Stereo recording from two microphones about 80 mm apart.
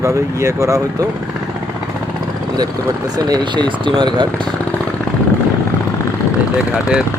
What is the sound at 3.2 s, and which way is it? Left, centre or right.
Speech, right.